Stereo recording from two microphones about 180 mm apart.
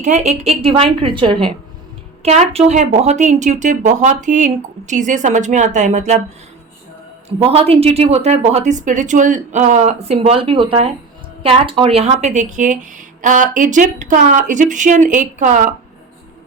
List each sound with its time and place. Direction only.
0.0 s speech: 40° right (ahead or behind)
7.3 s speech: 35° right (ahead or behind)